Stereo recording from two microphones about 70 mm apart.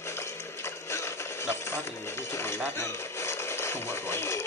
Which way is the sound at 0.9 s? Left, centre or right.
Left.